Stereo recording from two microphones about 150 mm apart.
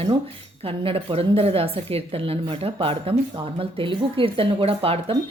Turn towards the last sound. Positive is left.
turn(degrees=-40)  # may be behind; listen again after turning